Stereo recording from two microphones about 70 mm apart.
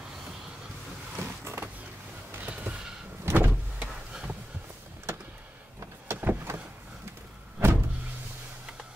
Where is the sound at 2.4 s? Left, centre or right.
Right.